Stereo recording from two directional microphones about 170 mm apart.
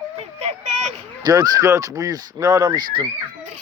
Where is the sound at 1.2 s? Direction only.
20° right (ahead or behind).